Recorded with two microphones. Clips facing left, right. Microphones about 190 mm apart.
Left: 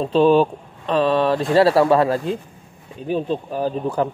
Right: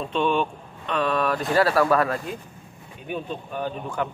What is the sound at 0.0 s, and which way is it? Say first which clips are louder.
Speech: left 9 dB; 35° left (ahead or behind).